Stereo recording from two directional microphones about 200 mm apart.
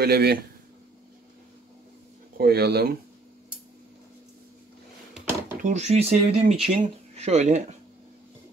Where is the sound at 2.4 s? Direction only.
50° right (ahead or behind).